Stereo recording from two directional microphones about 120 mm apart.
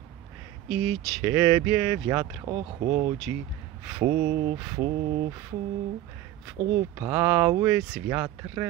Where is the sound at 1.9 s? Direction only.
30° right (ahead or behind).